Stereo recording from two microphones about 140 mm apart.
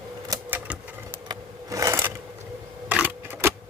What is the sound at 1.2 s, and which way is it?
Sewing machine, 25° right (ahead or behind).